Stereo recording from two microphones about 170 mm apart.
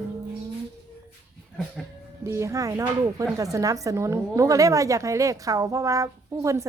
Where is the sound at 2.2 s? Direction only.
15° right (ahead or behind).